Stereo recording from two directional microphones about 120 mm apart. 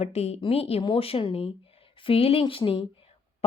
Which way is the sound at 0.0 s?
60° left (ahead or behind).